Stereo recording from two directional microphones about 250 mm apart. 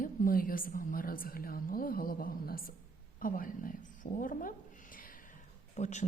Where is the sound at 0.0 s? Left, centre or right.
Left.